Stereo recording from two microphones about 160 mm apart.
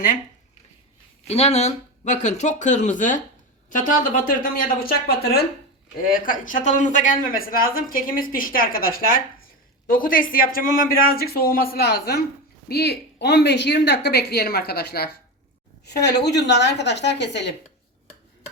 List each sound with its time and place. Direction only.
1.3 s speech: 40° left (ahead or behind); by 5.5 s 75° left (ahead or behind)
6.0 s speech: 60° left (ahead or behind)
12.6 s a woman's voice: 90° left